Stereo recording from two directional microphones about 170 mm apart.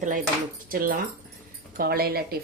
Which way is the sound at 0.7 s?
60° right (ahead or behind).